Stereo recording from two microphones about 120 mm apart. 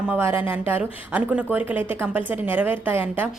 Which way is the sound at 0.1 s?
20° right (ahead or behind).